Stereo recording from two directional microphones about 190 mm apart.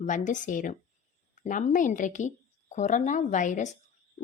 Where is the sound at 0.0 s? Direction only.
40° left (ahead or behind).